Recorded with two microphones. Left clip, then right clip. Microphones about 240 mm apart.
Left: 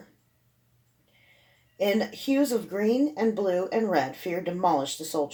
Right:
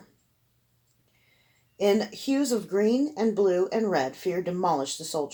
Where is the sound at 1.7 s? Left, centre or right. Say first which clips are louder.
Right 2 dB; right.